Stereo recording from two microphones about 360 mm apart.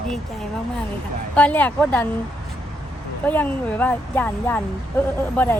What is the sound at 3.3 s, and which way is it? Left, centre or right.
A woman's voice, centre.